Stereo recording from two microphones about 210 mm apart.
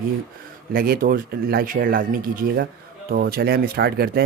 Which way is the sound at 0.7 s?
45° right (ahead or behind).